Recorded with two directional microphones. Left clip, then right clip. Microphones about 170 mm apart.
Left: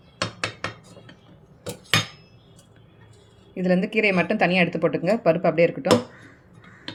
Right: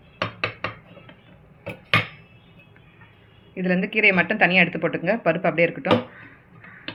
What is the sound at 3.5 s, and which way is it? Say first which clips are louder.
A woman's voice: left 1 dB; 40° left (ahead or behind).